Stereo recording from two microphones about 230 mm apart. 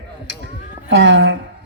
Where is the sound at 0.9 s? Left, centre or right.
Right.